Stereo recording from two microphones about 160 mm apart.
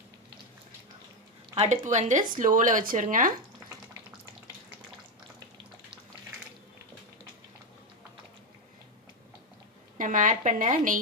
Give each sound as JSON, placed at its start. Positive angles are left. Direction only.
{"t": 1.5, "sound": "speech", "side_deg": -50}
{"t": 10.0, "sound": "speech", "side_deg": -55}